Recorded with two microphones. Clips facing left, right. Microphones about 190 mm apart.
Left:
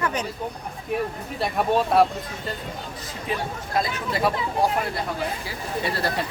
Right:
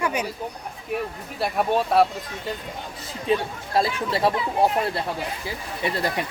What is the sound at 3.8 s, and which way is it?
Speech, 30° right (ahead or behind).